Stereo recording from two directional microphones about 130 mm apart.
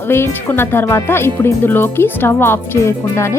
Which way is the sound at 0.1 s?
20° left (ahead or behind).